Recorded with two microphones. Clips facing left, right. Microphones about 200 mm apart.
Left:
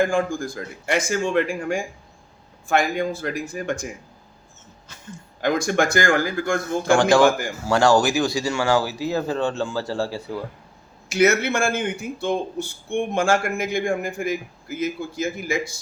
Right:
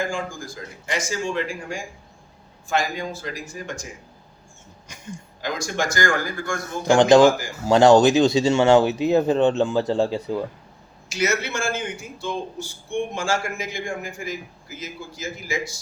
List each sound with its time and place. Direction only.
0.0 s speech: 55° left (ahead or behind)
4.9 s a sound: 15° right (ahead or behind)
5.4 s speech: 55° left (ahead or behind)
6.8 s speech: 20° right (ahead or behind)
11.1 s speech: 55° left (ahead or behind)